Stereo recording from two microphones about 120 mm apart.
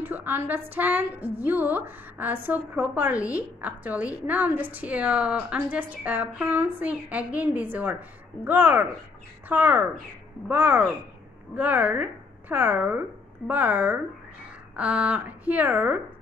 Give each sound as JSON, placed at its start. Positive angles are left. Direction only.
{"t": 0.0, "sound": "a woman's voice", "side_deg": -15}